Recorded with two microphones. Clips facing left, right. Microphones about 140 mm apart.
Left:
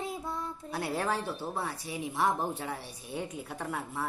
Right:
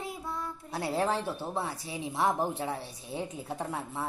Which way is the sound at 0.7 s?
25° right (ahead or behind).